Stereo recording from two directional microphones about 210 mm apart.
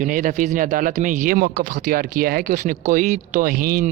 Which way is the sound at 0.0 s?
40° right (ahead or behind).